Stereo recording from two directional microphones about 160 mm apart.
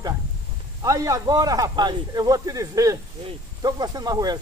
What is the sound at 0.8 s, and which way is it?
A man's voice, 20° right (ahead or behind).